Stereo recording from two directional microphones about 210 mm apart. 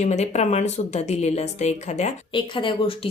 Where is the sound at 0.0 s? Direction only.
30° left (ahead or behind).